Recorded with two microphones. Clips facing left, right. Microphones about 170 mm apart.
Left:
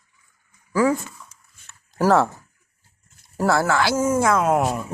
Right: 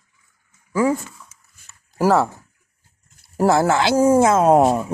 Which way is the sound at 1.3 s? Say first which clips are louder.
Left 1 dB; 5° right (ahead or behind).